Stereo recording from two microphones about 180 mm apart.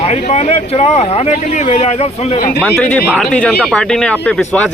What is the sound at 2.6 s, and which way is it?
Speech, 5° left (ahead or behind).